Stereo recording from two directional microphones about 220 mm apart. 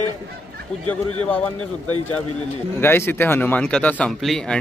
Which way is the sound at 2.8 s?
10° left (ahead or behind).